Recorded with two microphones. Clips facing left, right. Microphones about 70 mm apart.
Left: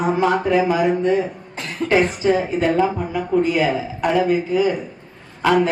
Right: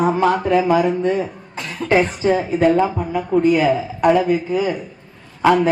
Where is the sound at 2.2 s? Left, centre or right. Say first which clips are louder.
Right 1 dB; right.